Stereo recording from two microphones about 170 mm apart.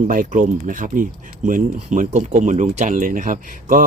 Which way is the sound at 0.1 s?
55° right (ahead or behind).